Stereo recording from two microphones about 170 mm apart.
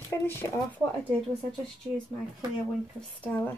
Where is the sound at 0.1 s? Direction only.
15° left (ahead or behind).